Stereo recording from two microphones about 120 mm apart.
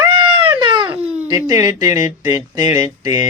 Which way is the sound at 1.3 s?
30° right (ahead or behind).